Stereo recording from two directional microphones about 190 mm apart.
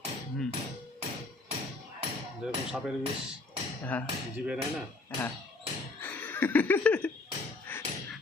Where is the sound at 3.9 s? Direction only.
10° left (ahead or behind).